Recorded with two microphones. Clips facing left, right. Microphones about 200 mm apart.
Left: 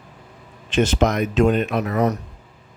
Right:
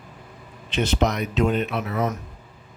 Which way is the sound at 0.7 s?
45° left (ahead or behind).